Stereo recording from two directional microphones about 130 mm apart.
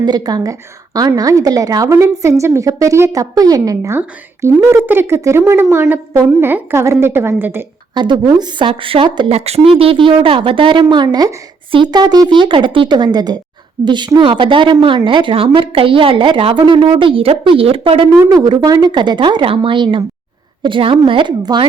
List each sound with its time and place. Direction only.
0.0 s a woman's voice: 30° right (ahead or behind)
7.9 s a woman's voice: 35° right (ahead or behind)
9.3 s a woman's voice: 50° right (ahead or behind)
18.3 s a woman's voice: 30° right (ahead or behind)